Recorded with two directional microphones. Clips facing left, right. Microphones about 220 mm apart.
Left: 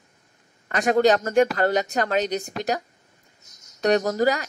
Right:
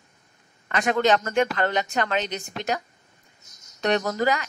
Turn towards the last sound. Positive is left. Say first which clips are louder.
# left 3 dB
turn(degrees=40)  # may be behind; listen again after turning